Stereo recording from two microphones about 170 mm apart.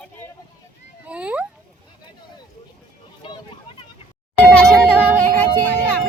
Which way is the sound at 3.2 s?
30° left (ahead or behind).